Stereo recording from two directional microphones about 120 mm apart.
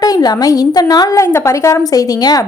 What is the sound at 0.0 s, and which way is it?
A woman's voice, 35° left (ahead or behind).